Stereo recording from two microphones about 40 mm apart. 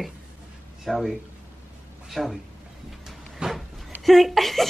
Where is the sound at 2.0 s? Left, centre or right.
Centre.